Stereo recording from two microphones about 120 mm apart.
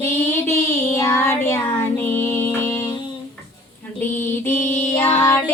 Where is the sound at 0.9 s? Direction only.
25° left (ahead or behind).